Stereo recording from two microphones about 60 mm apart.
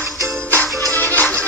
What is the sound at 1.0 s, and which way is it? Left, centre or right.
Music, left.